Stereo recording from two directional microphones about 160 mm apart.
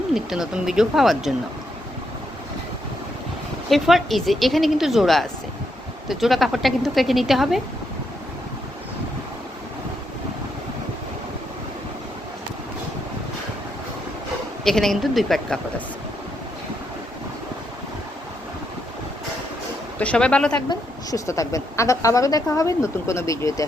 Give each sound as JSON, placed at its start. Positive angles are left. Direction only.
{"t": 0.1, "sound": "speech", "side_deg": 0}
{"t": 3.7, "sound": "speech", "side_deg": 0}
{"t": 14.6, "sound": "speech", "side_deg": 0}
{"t": 20.0, "sound": "speech", "side_deg": 5}
{"t": 20.7, "sound": "a woman's voice", "side_deg": 20}